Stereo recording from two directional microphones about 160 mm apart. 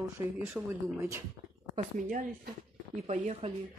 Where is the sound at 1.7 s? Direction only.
55° right (ahead or behind).